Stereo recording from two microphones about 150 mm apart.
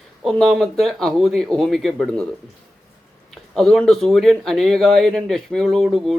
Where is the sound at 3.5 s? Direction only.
5° left (ahead or behind).